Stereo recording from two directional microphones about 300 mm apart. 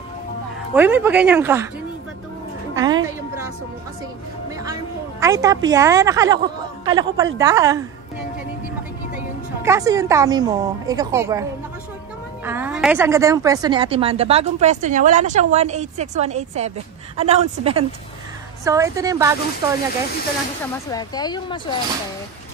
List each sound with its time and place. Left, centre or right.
0.7 s a woman's voice: centre
2.7 s a woman's voice: centre
5.2 s a woman's voice: centre
9.6 s a woman's voice: centre
12.4 s a woman's voice: centre
20.9 s speech: centre